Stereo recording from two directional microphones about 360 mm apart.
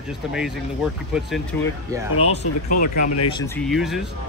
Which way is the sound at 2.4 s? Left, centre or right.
Left.